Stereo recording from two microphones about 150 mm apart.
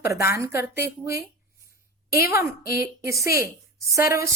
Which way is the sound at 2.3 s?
20° right (ahead or behind).